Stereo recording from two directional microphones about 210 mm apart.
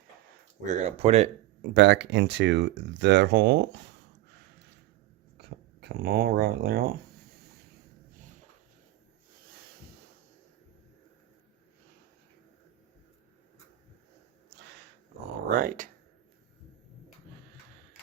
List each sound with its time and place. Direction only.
0.6 s speech: 35° right (ahead or behind)
1.7 s speech: 55° right (ahead or behind)
5.4 s speech: 50° right (ahead or behind)
15.4 s speech: 40° right (ahead or behind)